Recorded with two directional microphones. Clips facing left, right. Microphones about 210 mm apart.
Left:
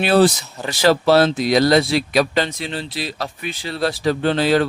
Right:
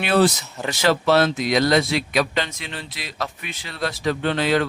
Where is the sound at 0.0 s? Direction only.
35° left (ahead or behind).